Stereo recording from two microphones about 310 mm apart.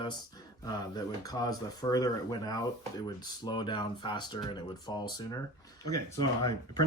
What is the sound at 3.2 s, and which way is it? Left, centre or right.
Speech, centre.